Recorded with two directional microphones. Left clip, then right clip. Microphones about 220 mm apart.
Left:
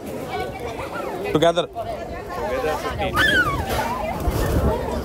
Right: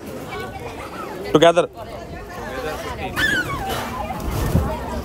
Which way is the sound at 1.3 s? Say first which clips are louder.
Right 5 dB; 25° right (ahead or behind).